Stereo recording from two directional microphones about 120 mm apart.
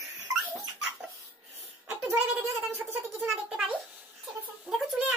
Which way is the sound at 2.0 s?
20° right (ahead or behind).